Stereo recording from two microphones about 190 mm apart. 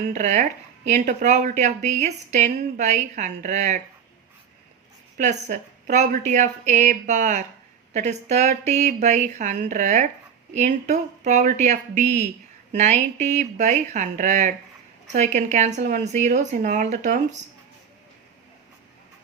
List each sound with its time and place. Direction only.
0.1 s a woman's voice: 40° right (ahead or behind)
5.1 s a woman's voice: 40° right (ahead or behind)